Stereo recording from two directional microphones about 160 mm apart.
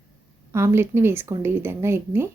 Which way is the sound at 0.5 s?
15° right (ahead or behind).